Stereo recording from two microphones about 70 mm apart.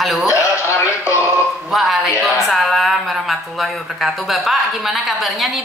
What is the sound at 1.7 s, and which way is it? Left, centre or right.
Music, centre.